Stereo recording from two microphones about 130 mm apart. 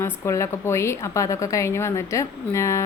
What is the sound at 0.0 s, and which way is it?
A woman's voice, 20° left (ahead or behind).